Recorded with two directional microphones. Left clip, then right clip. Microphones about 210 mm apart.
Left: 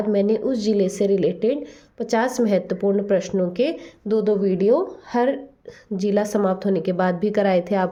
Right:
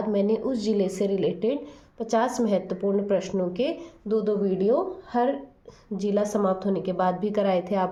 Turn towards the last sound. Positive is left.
turn(degrees=30)  # may be behind; listen again after turning